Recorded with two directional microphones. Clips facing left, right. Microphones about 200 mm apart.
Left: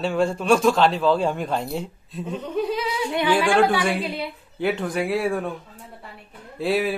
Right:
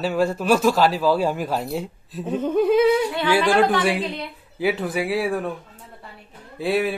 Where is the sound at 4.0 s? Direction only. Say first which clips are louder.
Even; 10° left (ahead or behind).